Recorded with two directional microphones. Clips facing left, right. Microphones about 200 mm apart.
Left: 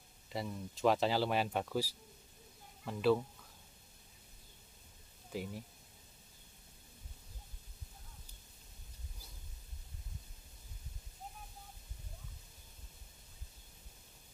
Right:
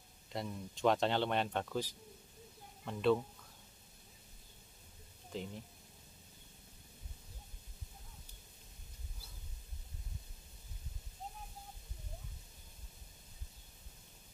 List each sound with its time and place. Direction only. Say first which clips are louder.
0.3 s speech: left 1 dB; centre (ahead or behind)
5.3 s speech: left 2 dB; 5° left (ahead or behind)